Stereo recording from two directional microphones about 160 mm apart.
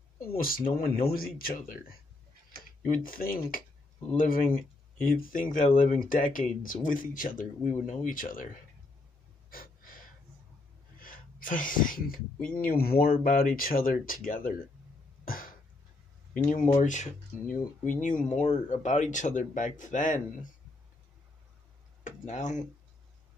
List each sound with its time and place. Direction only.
0.4 s speech: 65° left (ahead or behind)
2.8 s speech: 60° left (ahead or behind)
9.5 s gasp: 65° left (ahead or behind)
11.0 s a sound: 60° left (ahead or behind)
12.5 s speech: 70° left (ahead or behind)
15.2 s cough: 60° left (ahead or behind)
16.4 s speech: 50° left (ahead or behind)
22.0 s tick-tock: 50° left (ahead or behind)